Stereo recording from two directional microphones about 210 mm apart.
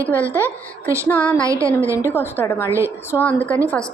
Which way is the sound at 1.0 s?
10° left (ahead or behind).